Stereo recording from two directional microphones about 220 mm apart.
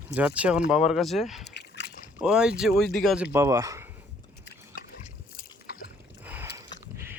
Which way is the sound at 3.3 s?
15° right (ahead or behind).